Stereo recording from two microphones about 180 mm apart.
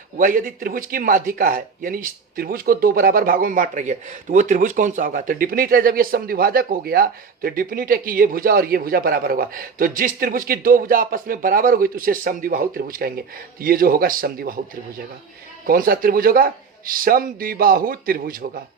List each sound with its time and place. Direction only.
0.2 s speech: 50° right (ahead or behind)
15.6 s speech: 50° right (ahead or behind)